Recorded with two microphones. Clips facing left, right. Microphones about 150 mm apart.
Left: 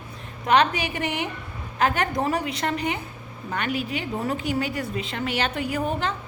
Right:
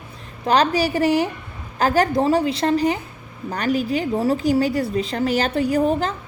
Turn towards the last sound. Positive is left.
turn(degrees=-40)  # may be behind; listen again after turning